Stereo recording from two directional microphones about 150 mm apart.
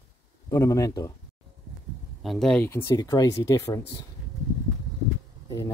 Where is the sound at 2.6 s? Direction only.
20° left (ahead or behind).